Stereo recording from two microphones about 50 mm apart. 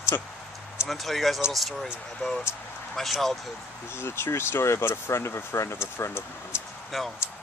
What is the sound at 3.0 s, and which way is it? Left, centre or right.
Speech, centre.